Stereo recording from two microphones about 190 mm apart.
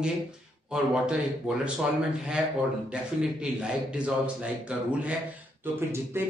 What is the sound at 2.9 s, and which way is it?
A man's voice, 5° right (ahead or behind).